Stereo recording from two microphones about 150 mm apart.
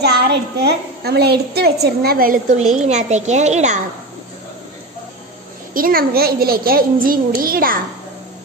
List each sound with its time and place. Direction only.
0.0 s a woman's voice: 90° right; by 3.8 s 50° right (ahead or behind)
5.7 s a woman's voice: 75° right (ahead or behind)